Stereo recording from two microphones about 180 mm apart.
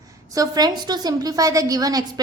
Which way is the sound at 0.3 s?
20° right (ahead or behind).